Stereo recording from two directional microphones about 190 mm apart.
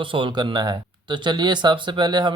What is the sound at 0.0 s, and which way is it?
Speech, 25° right (ahead or behind).